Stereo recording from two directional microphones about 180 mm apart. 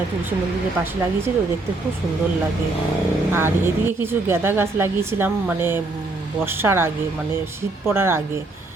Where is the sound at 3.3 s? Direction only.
10° right (ahead or behind).